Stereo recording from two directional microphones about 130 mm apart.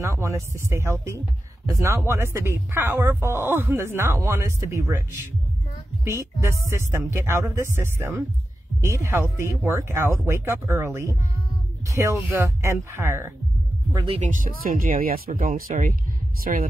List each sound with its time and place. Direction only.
0.0 s speech: 25° right (ahead or behind)
14.2 s speech: 90° right